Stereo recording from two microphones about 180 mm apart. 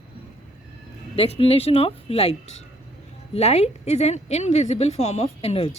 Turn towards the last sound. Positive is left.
turn(degrees=35)  # may be behind; listen again after turning